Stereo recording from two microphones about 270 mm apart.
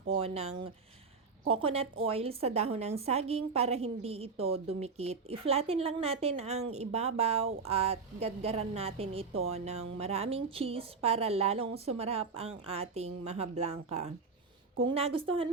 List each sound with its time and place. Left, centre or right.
0.1 s a woman's voice: right